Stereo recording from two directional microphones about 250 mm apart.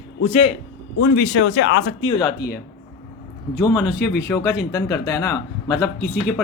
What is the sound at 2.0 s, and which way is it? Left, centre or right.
Speech, centre.